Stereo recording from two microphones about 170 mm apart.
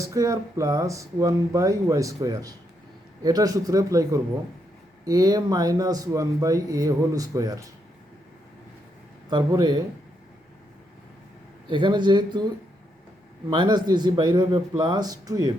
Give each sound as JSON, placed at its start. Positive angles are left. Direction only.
{"t": 0.0, "sound": "speech", "side_deg": -20}
{"t": 9.3, "sound": "speech", "side_deg": -25}
{"t": 11.7, "sound": "speech", "side_deg": -25}
{"t": 13.5, "sound": "speech", "side_deg": -25}